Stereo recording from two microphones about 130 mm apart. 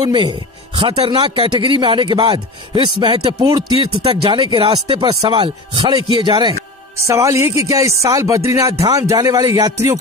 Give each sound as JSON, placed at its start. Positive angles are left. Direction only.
{"t": 0.0, "sound": "speech", "side_deg": -35}
{"t": 4.0, "sound": "speech", "side_deg": -40}
{"t": 7.1, "sound": "music", "side_deg": -20}